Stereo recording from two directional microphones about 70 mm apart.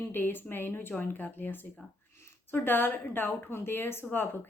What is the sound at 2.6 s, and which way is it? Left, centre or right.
Speech, left.